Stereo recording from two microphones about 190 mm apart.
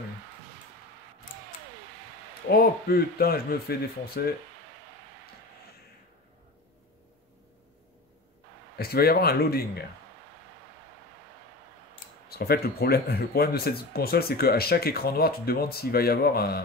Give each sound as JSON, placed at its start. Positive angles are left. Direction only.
{"t": 2.5, "sound": "speech", "side_deg": 50}
{"t": 8.7, "sound": "speech", "side_deg": 55}
{"t": 12.3, "sound": "speech", "side_deg": 55}